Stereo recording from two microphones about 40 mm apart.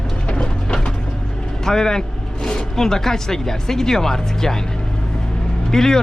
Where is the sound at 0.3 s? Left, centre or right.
Left.